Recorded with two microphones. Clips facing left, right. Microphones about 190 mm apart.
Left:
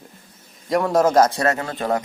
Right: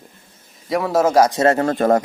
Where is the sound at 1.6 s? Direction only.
45° right (ahead or behind).